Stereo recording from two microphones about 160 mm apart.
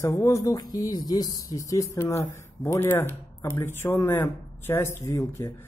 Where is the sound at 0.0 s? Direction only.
15° left (ahead or behind).